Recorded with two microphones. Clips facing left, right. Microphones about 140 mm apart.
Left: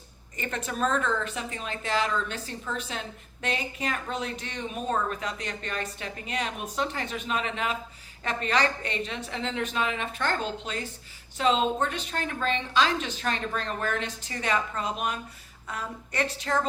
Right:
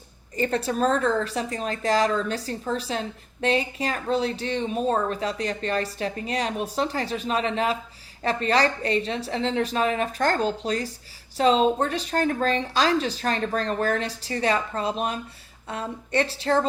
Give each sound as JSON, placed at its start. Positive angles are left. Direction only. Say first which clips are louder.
{"t": 0.3, "sound": "a woman's voice", "louder": "right 7 dB", "side_deg": -35}